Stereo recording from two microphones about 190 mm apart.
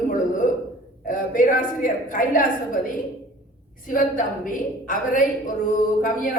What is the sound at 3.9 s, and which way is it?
A woman's voice, 45° left (ahead or behind).